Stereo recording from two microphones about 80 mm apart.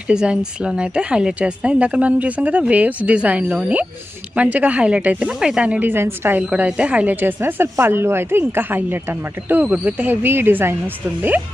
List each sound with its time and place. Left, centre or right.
0.1 s speech: centre
5.9 s speech: right
6.5 s speech: centre
9.6 s speech: centre